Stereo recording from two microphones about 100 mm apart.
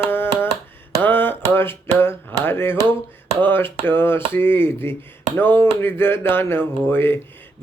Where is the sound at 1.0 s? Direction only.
20° left (ahead or behind).